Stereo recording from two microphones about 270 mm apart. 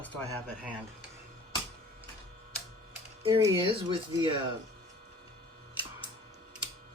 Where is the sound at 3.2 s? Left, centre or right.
Centre.